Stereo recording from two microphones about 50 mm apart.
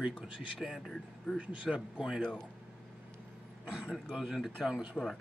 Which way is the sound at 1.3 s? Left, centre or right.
Centre.